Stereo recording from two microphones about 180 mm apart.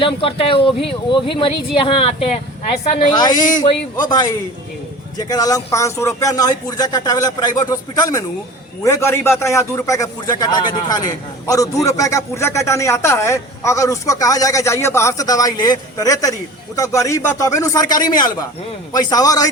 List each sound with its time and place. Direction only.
0.0 s a man's voice: 30° left (ahead or behind)